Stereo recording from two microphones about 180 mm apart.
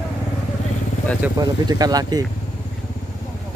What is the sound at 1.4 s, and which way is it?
Speech, 20° right (ahead or behind).